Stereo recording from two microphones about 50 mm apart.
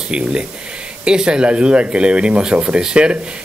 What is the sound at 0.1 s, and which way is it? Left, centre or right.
Speech, centre.